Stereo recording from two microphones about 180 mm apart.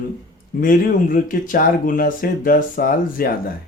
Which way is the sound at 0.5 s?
50° left (ahead or behind).